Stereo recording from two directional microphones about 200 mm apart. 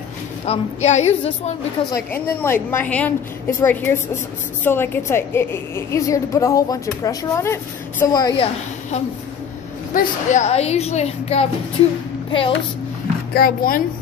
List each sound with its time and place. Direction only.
0.5 s a woman's voice: 35° left (ahead or behind)
1.9 s a woman's voice: 15° left (ahead or behind)
9.9 s a woman's voice: 35° left (ahead or behind)
13.3 s speech: 45° left (ahead or behind)